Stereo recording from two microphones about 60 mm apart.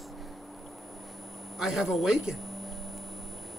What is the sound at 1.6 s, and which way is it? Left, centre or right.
Speech, centre.